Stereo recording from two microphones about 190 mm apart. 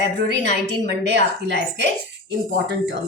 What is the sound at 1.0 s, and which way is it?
A woman's voice, 65° right (ahead or behind).